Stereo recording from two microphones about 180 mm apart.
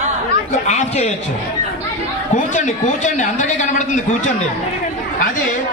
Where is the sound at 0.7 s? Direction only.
40° left (ahead or behind).